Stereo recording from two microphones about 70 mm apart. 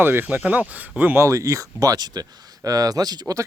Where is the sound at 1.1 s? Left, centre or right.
Right.